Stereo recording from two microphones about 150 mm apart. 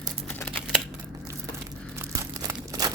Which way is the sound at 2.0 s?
20° right (ahead or behind).